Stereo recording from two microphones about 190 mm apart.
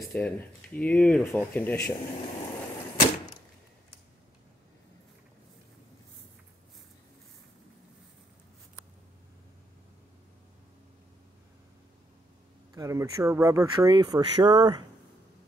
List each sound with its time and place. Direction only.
0.0 s speech: 5° left (ahead or behind)
12.7 s speech: 15° right (ahead or behind)